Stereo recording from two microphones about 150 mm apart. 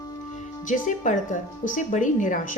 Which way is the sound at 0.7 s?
60° left (ahead or behind).